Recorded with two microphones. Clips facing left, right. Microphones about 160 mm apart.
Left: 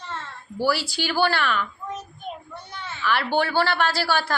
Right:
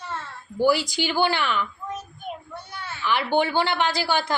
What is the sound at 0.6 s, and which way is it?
A woman's voice, 15° right (ahead or behind).